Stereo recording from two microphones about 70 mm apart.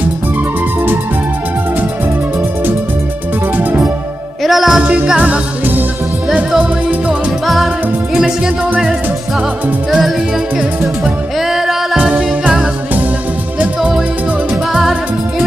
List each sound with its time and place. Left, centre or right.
4.4 s music: centre
4.8 s music: centre
7.1 s music: centre
9.8 s music: centre
11.5 s music: centre
12.0 s music: centre
14.7 s music: centre